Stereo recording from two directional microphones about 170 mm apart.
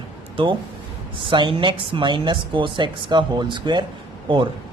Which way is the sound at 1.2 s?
30° right (ahead or behind).